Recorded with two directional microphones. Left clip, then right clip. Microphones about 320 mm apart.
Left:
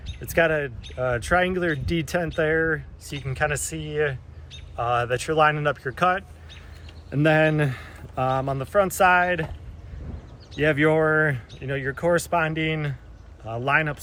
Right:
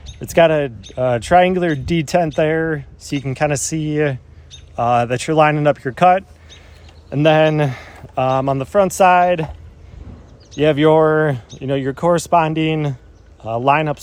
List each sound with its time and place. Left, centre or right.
0.2 s a man's voice: centre
2.5 s speech: right
3.0 s a man's voice: centre
10.6 s a man's voice: centre
10.9 s speech: right
11.6 s a man's voice: centre